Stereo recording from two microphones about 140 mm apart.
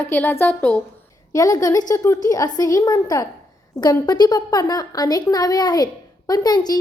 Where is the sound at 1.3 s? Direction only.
25° left (ahead or behind).